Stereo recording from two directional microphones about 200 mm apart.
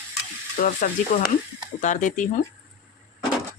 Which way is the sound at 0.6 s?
40° left (ahead or behind).